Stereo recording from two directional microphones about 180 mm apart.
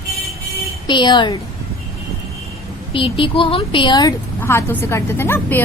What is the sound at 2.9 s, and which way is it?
A woman's voice, 30° left (ahead or behind).